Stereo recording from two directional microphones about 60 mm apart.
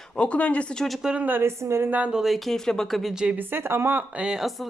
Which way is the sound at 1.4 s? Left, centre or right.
Right.